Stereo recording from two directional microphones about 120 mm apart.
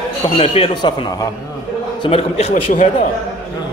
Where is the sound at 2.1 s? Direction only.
55° left (ahead or behind).